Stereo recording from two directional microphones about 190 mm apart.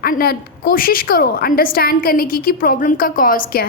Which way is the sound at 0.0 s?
50° left (ahead or behind).